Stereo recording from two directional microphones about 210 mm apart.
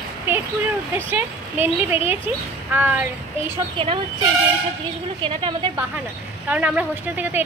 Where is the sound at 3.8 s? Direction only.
25° right (ahead or behind).